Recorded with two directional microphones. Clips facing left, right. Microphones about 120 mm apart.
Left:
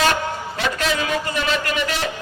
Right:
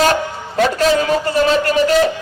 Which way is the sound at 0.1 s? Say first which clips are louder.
Right 4 dB; 35° right (ahead or behind).